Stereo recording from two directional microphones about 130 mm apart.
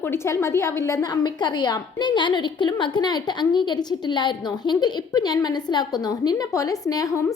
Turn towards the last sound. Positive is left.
turn(degrees=25)  # may be behind; listen again after turning